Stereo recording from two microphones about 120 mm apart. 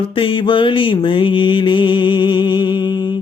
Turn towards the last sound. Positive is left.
turn(degrees=40)  # may be behind; listen again after turning